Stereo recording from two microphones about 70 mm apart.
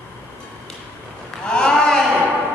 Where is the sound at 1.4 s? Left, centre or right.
Centre.